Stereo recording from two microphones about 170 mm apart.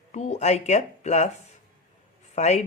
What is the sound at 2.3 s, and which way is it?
Speech, 40° left (ahead or behind).